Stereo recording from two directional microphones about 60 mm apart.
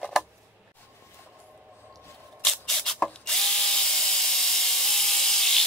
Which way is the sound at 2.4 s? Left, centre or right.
Centre.